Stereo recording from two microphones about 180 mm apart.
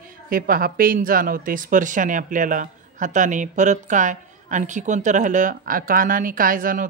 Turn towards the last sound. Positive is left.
turn(degrees=-50)  # may be behind; listen again after turning